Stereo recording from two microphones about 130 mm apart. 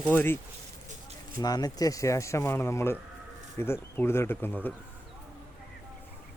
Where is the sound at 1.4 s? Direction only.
30° left (ahead or behind); by 4.7 s 15° left (ahead or behind).